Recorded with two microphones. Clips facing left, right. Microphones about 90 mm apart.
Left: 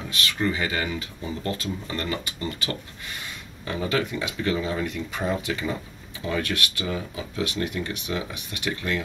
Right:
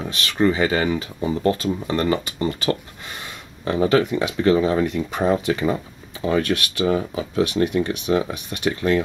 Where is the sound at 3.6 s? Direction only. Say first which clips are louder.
Right 8 dB; 30° right (ahead or behind).